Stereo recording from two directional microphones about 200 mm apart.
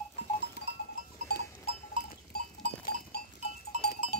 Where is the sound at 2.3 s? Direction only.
50° left (ahead or behind).